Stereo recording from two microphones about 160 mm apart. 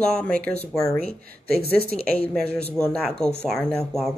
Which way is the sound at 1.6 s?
35° left (ahead or behind).